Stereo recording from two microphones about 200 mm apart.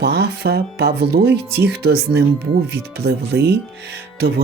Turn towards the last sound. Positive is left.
turn(degrees=-55)  # may be behind; listen again after turning